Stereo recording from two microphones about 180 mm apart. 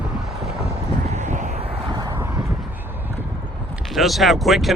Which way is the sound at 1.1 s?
40° right (ahead or behind).